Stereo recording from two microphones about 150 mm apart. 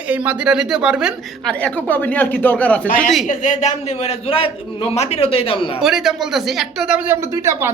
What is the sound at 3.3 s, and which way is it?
A man's voice, 55° left (ahead or behind).